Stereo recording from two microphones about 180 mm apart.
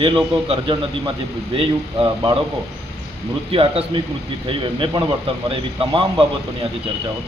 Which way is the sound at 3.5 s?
30° right (ahead or behind).